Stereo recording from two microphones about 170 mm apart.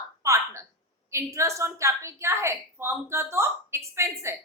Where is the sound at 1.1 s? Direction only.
15° right (ahead or behind).